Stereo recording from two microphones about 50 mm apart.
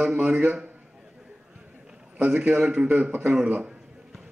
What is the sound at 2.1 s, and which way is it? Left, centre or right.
Speech, right.